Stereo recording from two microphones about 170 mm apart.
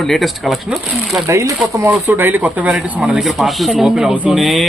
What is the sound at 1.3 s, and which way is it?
Speech, 20° right (ahead or behind).